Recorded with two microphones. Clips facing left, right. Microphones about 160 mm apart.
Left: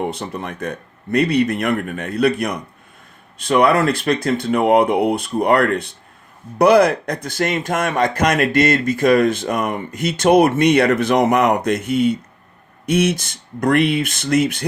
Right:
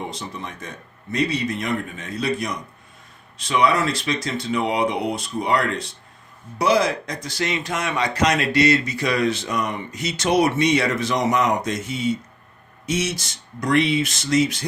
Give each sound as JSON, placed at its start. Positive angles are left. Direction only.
{"t": 0.1, "sound": "a man's voice", "side_deg": 60}